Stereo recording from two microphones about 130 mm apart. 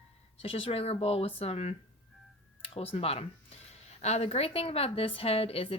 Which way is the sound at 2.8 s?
50° left (ahead or behind).